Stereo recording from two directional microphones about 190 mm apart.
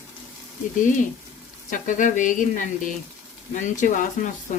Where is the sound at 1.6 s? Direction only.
40° left (ahead or behind).